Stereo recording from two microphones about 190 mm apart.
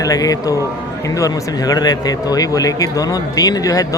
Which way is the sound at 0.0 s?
20° left (ahead or behind).